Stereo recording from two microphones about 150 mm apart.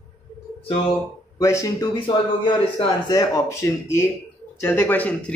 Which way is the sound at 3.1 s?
25° left (ahead or behind).